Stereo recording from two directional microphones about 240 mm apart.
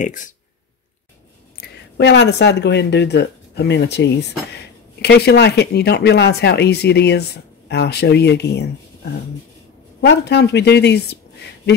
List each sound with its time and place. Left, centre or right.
0.0 s speech: left
1.6 s speech: left
10.0 s speech: left